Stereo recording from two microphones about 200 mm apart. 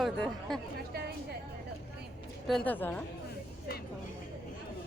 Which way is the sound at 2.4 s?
5° left (ahead or behind).